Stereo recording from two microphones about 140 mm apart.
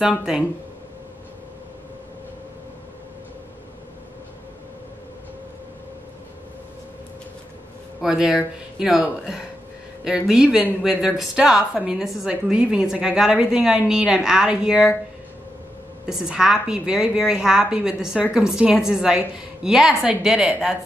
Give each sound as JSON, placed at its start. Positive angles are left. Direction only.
{"t": 0.0, "sound": "speech", "side_deg": -5}
{"t": 8.0, "sound": "speech", "side_deg": -5}
{"t": 16.1, "sound": "speech", "side_deg": -5}